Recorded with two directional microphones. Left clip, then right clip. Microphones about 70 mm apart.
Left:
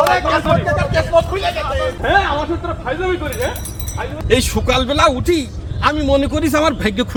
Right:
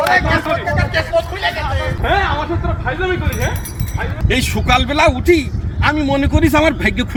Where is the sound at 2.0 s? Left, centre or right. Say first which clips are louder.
Left 1 dB; left.